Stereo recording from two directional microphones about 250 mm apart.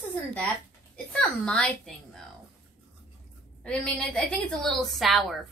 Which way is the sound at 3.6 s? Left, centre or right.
Centre.